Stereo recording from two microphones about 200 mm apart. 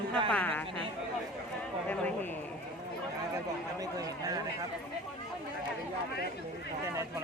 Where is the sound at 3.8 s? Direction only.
20° right (ahead or behind).